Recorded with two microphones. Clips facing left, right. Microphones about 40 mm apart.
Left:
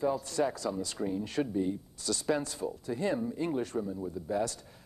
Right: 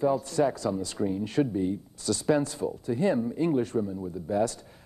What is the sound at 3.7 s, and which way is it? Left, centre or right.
Speech, centre.